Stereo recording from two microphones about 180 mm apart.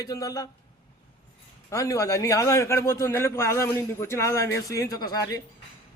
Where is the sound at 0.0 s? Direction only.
20° left (ahead or behind).